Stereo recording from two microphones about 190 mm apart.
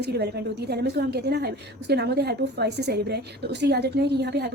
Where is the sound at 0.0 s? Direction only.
60° right (ahead or behind).